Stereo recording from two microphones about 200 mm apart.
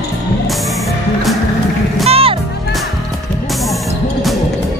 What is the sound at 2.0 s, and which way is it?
Music, 30° right (ahead or behind).